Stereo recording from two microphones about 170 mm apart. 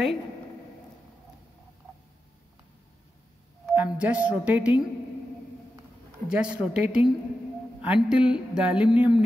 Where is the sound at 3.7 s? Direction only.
5° right (ahead or behind).